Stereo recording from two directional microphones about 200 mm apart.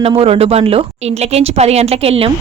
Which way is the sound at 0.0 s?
30° right (ahead or behind).